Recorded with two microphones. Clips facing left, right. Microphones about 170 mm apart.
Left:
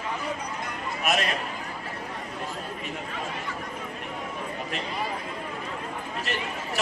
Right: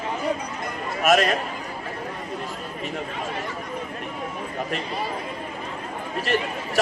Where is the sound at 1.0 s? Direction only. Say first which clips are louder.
Right 8 dB; 45° right (ahead or behind).